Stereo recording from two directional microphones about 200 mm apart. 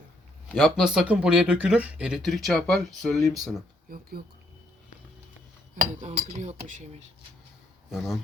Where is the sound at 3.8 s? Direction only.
50° right (ahead or behind).